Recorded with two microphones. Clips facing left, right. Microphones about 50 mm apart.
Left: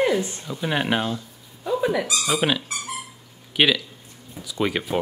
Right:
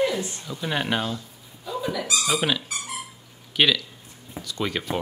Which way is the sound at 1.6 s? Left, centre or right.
Left.